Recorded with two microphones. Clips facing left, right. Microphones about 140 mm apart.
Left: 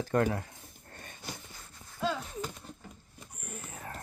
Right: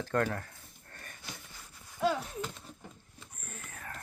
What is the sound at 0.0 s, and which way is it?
Speech, 10° left (ahead or behind).